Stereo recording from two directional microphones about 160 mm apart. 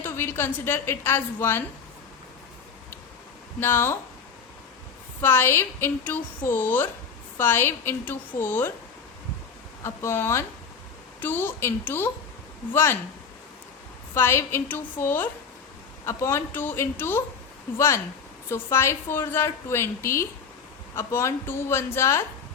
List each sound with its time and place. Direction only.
0.0 s a woman's voice: 15° left (ahead or behind)
3.6 s a woman's voice: 15° left (ahead or behind)
5.2 s a woman's voice: 15° left (ahead or behind)
9.8 s a woman's voice: 15° left (ahead or behind)
14.1 s a woman's voice: 15° left (ahead or behind)